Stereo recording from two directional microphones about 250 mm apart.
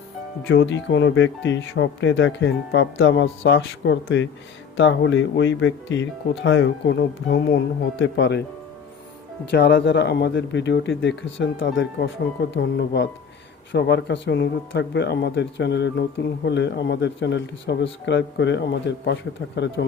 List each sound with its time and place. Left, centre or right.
0.4 s speech: left
9.5 s speech: left